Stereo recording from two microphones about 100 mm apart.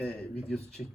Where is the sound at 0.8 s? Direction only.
10° right (ahead or behind).